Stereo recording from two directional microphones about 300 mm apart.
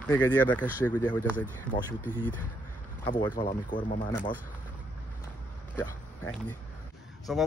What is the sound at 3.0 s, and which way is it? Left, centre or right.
Speech, centre.